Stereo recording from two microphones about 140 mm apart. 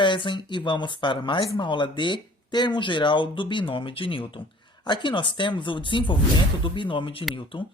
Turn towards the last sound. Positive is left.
turn(degrees=40)  # may be behind; listen again after turning